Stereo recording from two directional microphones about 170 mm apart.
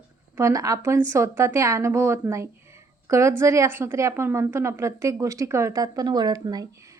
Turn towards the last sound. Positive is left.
turn(degrees=-25)  # may be behind; listen again after turning